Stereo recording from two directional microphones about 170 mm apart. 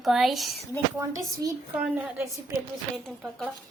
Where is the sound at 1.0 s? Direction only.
20° right (ahead or behind).